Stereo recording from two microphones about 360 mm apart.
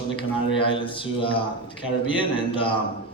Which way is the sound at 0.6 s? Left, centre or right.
Centre.